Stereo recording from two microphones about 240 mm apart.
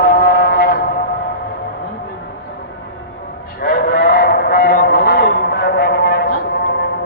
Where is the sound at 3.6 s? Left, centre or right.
Left.